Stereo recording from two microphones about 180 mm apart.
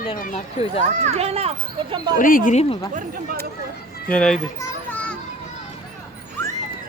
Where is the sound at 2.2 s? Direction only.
50° left (ahead or behind).